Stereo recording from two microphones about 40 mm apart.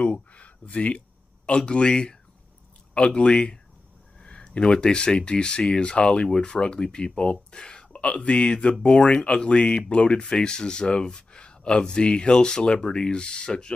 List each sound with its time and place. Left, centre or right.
0.0 s a sound: left
1.6 s speech: left
4.2 s speech: left